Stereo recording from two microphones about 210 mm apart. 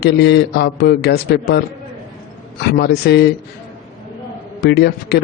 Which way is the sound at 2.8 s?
50° left (ahead or behind).